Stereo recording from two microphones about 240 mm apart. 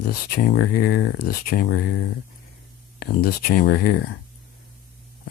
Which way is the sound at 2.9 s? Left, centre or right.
Left.